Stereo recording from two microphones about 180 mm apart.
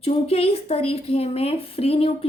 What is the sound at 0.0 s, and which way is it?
Speech, 35° left (ahead or behind).